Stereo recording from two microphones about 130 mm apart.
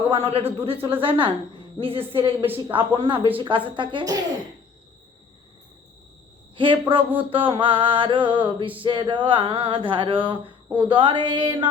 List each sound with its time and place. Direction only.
0.1 s speech: 50° right (ahead or behind)
1.0 s mantra: 40° right (ahead or behind)
1.8 s speech: 45° right (ahead or behind)
3.8 s mantra: 35° right (ahead or behind)
6.6 s mantra: 40° right (ahead or behind)